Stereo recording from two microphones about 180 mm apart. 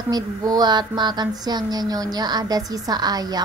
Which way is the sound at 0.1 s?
20° right (ahead or behind).